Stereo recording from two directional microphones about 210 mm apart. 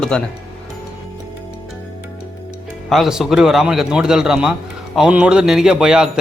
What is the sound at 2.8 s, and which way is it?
A man's voice, centre (ahead or behind).